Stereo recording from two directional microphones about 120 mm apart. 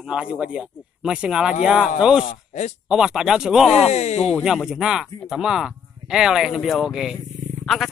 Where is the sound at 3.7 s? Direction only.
65° left (ahead or behind).